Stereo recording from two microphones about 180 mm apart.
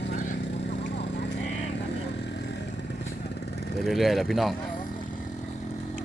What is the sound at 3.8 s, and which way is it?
Speech, centre (ahead or behind).